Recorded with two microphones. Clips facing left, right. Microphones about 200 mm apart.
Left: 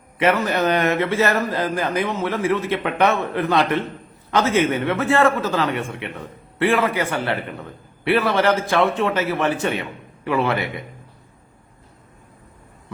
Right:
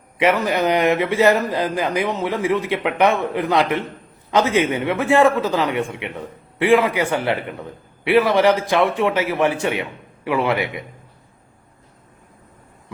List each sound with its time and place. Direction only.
0.2 s a man's voice: 15° right (ahead or behind)